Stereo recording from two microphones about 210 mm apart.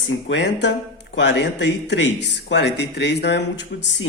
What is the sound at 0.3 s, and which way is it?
Speech, 55° left (ahead or behind).